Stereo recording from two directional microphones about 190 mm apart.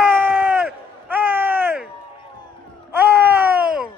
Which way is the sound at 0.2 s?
10° right (ahead or behind).